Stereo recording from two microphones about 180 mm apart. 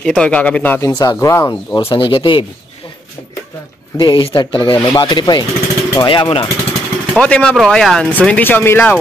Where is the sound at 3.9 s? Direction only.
25° left (ahead or behind).